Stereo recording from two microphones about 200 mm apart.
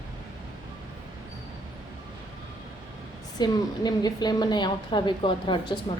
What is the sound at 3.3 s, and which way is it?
A woman's voice, 20° left (ahead or behind).